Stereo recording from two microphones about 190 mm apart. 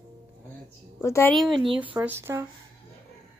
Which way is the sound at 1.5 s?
25° right (ahead or behind).